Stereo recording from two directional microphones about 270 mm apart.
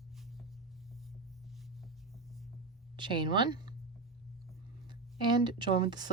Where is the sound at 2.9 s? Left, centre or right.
Centre.